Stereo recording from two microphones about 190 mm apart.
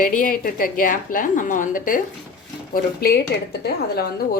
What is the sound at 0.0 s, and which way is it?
A woman's voice, 45° left (ahead or behind).